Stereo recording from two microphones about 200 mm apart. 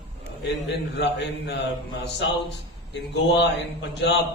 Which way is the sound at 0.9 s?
60° left (ahead or behind).